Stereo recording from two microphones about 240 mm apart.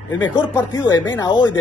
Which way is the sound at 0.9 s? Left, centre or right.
Centre.